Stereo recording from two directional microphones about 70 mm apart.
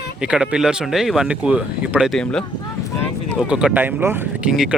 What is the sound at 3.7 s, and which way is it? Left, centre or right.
Speech, right.